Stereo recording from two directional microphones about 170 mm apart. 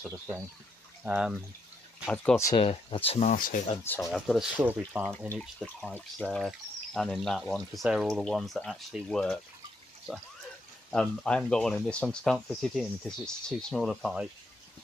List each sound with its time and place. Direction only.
0.0 s speech: 5° right (ahead or behind)
2.5 s speech: 30° left (ahead or behind)
3.3 s speech: 50° left (ahead or behind)
3.8 s speech: 10° left (ahead or behind); by 5.0 s 10° right (ahead or behind)
5.4 s speech: centre (ahead or behind)
10.9 s speech: 5° left (ahead or behind)